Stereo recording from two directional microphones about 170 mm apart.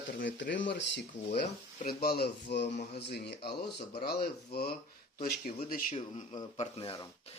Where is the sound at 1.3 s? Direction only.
45° left (ahead or behind).